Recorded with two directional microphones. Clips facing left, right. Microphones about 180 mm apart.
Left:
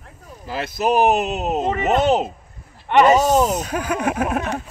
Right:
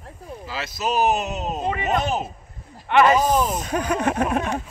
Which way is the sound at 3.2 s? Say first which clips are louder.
Left 4 dB; 80° left.